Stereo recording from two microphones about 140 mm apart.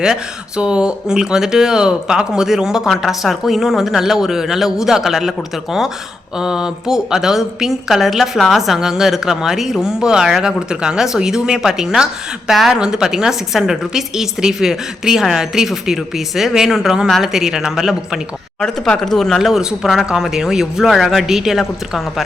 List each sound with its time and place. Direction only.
0.0 s a woman's voice: 5° right (ahead or behind)
6.4 s a woman's voice: 5° right (ahead or behind)